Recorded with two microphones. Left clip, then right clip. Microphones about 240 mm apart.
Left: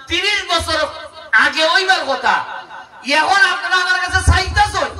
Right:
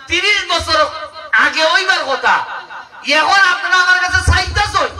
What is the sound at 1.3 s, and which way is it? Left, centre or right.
Speech, left.